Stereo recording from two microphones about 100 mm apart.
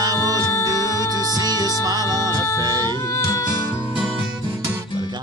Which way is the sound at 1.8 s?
40° right (ahead or behind).